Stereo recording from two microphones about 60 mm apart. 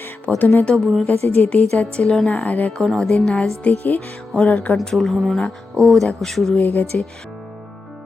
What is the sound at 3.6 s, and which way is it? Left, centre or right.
Speech, left.